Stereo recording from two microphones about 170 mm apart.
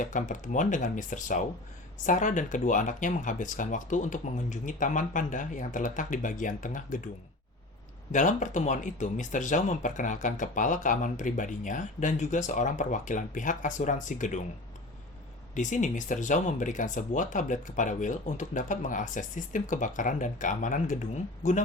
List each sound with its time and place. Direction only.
0.0 s speech: 50° left (ahead or behind)
8.1 s speech: 45° left (ahead or behind)
15.5 s speech: 45° left (ahead or behind)